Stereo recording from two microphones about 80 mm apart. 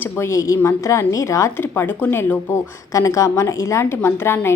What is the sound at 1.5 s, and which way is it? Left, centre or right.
Speech, left.